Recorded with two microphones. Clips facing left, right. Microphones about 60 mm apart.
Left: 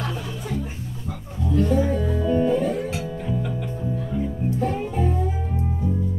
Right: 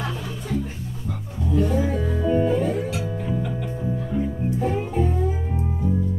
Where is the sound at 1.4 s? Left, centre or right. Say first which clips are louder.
Left 1 dB; centre.